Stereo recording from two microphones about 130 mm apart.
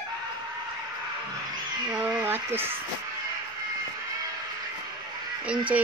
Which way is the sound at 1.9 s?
10° right (ahead or behind).